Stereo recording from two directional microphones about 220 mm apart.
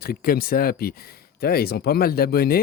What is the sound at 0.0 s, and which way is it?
Speech, 40° left (ahead or behind).